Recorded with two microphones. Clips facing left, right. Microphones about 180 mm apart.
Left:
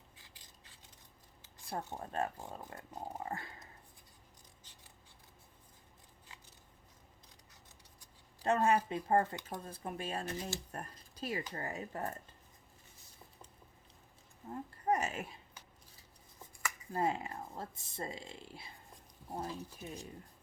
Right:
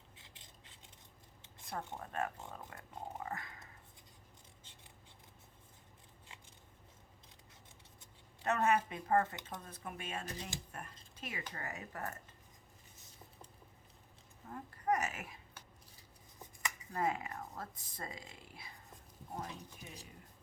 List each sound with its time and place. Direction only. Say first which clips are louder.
0.2 s a sound: right 1 dB; 25° right (ahead or behind)
1.6 s speech: left 2 dB; 30° left (ahead or behind)
8.4 s speech: left 2 dB; 30° left (ahead or behind)
14.4 s speech: left 2 dB; 25° left (ahead or behind)
16.9 s speech: left 2 dB; 30° left (ahead or behind)